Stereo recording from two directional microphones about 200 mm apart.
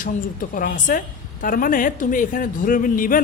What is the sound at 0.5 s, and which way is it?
Speech, 45° left (ahead or behind).